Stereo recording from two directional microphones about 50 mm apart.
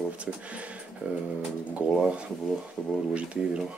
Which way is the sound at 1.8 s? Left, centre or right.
Right.